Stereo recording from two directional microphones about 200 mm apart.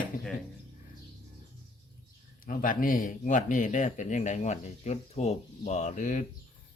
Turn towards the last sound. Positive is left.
turn(degrees=40)  # may be behind; listen again after turning